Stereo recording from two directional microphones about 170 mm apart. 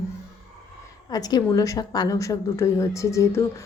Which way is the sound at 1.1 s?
25° left (ahead or behind).